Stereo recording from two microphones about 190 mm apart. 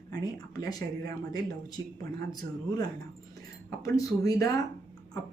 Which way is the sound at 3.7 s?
15° left (ahead or behind).